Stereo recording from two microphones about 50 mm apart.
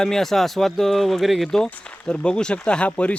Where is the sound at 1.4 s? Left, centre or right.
Centre.